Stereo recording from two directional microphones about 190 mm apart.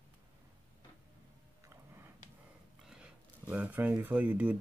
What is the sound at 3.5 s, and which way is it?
Speech, 10° right (ahead or behind).